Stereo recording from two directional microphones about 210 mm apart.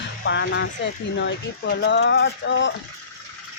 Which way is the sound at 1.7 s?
55° left (ahead or behind).